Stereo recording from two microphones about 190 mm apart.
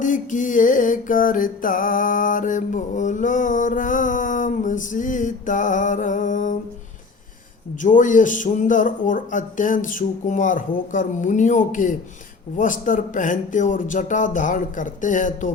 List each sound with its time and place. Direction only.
0.0 s music: 40° left (ahead or behind)
7.8 s speech: 45° left (ahead or behind)